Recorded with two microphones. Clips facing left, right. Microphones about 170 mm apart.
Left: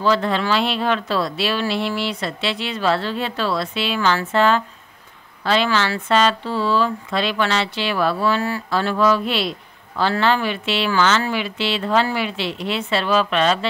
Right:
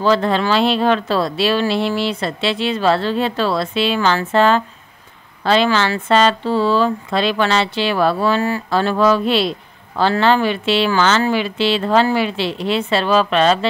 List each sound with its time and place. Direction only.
0.0 s speech: 35° right (ahead or behind)
8.7 s speech: 35° right (ahead or behind)